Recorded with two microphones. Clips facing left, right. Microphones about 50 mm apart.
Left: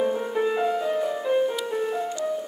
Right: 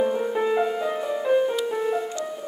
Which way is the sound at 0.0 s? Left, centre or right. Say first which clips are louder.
Right 1 dB; centre.